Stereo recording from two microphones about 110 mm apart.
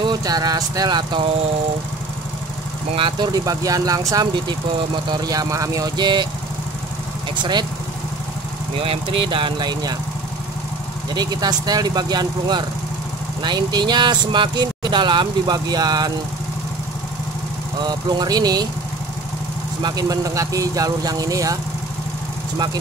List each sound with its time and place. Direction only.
0.0 s speech: 40° right (ahead or behind)
3.0 s speech: 50° right (ahead or behind)
3.3 s speech: 35° right (ahead or behind)
8.7 s speech: 60° right (ahead or behind); by 9.9 s 40° right (ahead or behind)
11.1 s speech: 40° right (ahead or behind)
17.8 s speech: 35° right (ahead or behind)
19.8 s speech: 35° right (ahead or behind)